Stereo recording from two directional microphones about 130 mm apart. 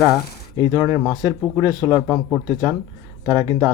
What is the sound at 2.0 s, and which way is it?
Speech, centre (ahead or behind).